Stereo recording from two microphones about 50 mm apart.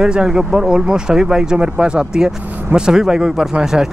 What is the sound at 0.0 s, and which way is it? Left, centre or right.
Speech, centre.